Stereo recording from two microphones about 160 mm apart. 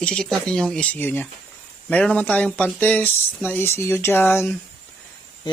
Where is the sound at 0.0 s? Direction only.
5° left (ahead or behind).